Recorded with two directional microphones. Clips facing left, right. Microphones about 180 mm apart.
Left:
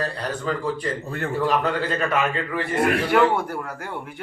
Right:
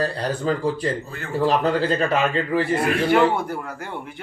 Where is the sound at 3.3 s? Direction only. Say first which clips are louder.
Even; 10° left (ahead or behind).